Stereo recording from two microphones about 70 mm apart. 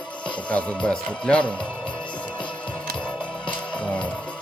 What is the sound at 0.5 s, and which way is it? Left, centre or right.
Speech, centre.